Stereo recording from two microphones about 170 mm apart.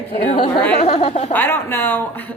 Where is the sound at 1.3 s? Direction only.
15° left (ahead or behind).